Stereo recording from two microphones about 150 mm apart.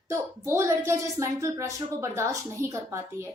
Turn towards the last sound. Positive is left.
turn(degrees=-20)  # may be behind; listen again after turning